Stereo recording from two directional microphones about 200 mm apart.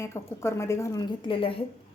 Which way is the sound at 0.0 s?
15° left (ahead or behind).